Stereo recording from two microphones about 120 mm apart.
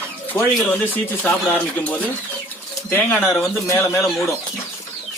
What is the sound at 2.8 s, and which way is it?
Speech, 15° left (ahead or behind).